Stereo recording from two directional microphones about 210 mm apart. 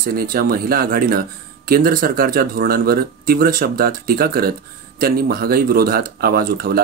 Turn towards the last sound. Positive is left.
turn(degrees=-45)  # may be behind; listen again after turning